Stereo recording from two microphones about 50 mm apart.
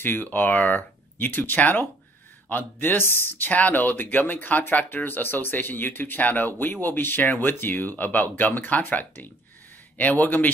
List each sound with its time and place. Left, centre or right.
0.0 s speech: left
3.4 s speech: left